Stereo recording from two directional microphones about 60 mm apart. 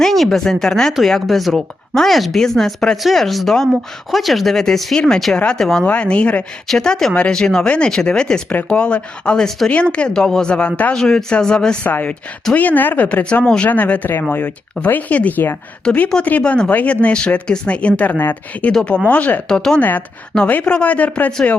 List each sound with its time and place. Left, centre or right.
0.0 s speech: centre
5.8 s speech: centre
6.7 s speech: centre
10.9 s speech: centre
11.9 s speech: left
15.9 s speech: centre
19.5 s speech: centre
20.7 s speech: centre